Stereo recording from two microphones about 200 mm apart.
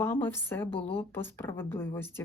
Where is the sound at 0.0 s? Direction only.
10° left (ahead or behind).